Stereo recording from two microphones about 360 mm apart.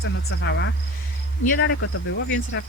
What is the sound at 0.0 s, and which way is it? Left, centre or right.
Speech, left.